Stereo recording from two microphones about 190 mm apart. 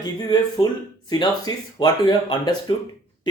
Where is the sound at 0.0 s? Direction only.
20° left (ahead or behind).